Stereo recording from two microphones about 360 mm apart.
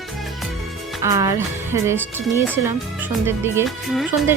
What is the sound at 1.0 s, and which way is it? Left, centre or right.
Speech, centre.